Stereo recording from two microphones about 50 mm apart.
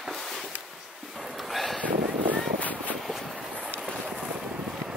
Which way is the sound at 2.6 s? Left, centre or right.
Left.